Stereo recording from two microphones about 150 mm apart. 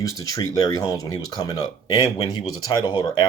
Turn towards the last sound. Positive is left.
turn(degrees=25)  # may be behind; listen again after turning